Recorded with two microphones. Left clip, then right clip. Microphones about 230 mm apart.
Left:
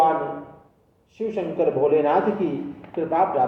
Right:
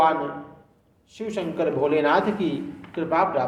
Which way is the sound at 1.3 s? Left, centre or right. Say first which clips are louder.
Left 2 dB; centre.